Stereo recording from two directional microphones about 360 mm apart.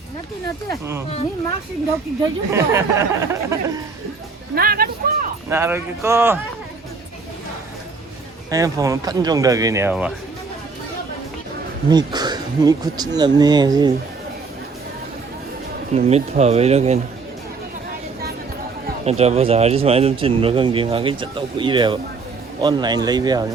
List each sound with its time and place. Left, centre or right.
0.7 s speech: centre
2.5 s speech: centre
4.5 s speech: right
5.5 s speech: centre
8.4 s speech: centre
11.9 s speech: centre
16.0 s speech: centre
18.9 s speech: centre